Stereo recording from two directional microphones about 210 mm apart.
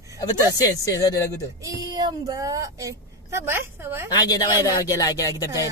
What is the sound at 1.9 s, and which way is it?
A woman's voice, 20° right (ahead or behind).